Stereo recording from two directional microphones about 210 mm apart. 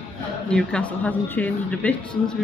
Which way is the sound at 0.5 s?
5° left (ahead or behind).